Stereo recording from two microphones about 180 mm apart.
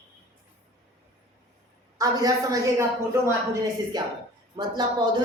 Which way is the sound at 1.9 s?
20° right (ahead or behind).